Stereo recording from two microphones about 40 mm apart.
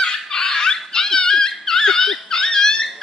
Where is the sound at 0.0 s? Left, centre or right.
Centre.